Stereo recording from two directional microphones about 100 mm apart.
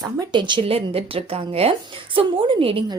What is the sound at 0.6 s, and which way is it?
A woman's voice, 75° right (ahead or behind).